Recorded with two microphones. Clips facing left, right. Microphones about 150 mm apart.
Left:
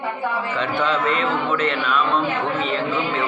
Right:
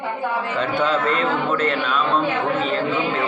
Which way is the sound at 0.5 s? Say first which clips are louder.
Right 2 dB; 35° right (ahead or behind).